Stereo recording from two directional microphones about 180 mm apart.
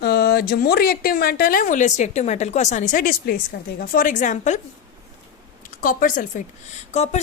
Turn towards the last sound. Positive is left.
turn(degrees=40)  # may be behind; listen again after turning